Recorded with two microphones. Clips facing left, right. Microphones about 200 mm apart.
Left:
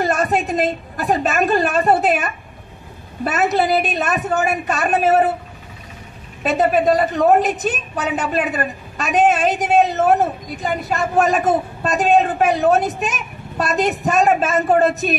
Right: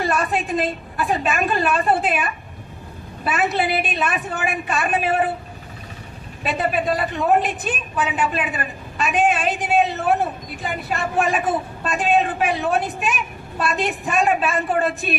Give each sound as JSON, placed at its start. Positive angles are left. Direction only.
{"t": 0.0, "sound": "a woman's voice", "side_deg": 40}
{"t": 6.4, "sound": "a woman's voice", "side_deg": 40}